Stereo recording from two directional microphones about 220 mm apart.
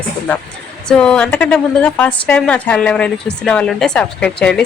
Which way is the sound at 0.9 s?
5° left (ahead or behind).